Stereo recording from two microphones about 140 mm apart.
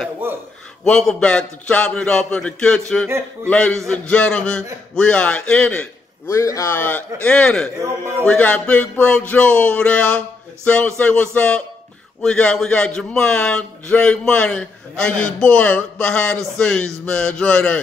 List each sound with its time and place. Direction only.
0.2 s a sound: 15° right (ahead or behind)
0.8 s a man's voice: 5° left (ahead or behind)
6.2 s a man's voice: 20° left (ahead or behind); by 7.7 s 5° left (ahead or behind)
7.8 s a man's voice: 20° right (ahead or behind)
8.3 s a man's voice: 10° left (ahead or behind)